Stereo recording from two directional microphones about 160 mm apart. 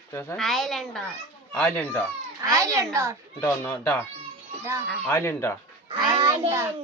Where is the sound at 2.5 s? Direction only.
20° right (ahead or behind).